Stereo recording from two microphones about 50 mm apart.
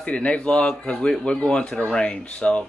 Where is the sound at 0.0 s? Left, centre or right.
Left.